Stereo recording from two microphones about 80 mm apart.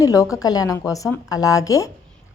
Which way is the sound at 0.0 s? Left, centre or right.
Left.